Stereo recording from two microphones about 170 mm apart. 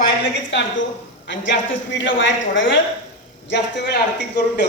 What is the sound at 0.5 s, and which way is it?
A woman's voice, 90° left.